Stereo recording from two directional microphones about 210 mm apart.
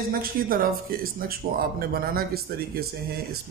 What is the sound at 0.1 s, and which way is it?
Speech, 45° right (ahead or behind).